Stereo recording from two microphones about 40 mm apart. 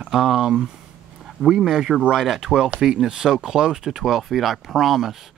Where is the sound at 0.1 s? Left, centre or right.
Centre.